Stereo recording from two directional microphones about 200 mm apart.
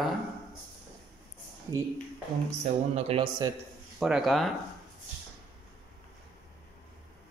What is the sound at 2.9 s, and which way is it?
Speech, 25° right (ahead or behind).